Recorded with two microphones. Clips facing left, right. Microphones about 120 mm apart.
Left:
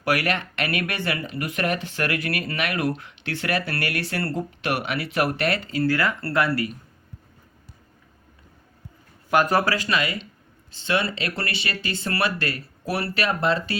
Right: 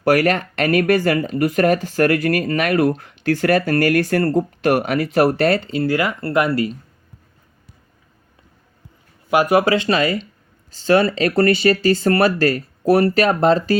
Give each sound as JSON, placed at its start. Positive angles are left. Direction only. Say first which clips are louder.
{"t": 0.0, "sound": "speech", "louder": "right 8 dB", "side_deg": -40}
{"t": 5.8, "sound": "speech", "louder": "right 3 dB", "side_deg": -15}
{"t": 9.3, "sound": "speech", "louder": "right 5 dB", "side_deg": -10}
{"t": 9.7, "sound": "speech", "louder": "right 8 dB", "side_deg": -30}